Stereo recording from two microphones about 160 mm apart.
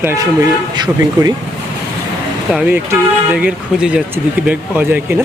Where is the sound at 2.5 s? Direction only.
10° right (ahead or behind).